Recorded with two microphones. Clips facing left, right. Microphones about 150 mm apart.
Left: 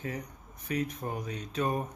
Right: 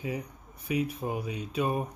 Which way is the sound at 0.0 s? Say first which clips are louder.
Right 3 dB; 10° right (ahead or behind).